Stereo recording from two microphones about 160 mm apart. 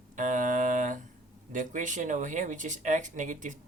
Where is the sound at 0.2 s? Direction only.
55° right (ahead or behind).